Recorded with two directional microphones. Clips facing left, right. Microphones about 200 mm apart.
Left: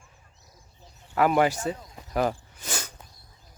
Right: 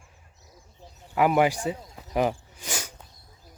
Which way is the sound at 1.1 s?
10° right (ahead or behind).